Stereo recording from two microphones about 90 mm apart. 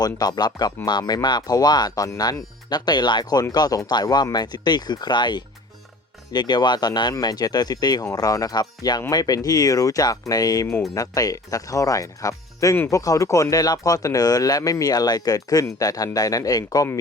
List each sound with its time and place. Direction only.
0.0 s speech: 45° left (ahead or behind)